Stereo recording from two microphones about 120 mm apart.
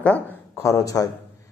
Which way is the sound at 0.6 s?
30° left (ahead or behind).